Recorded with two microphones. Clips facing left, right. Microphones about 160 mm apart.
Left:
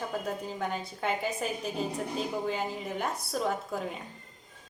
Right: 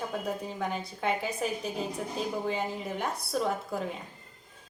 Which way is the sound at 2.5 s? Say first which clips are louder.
Right 1 dB; centre (ahead or behind).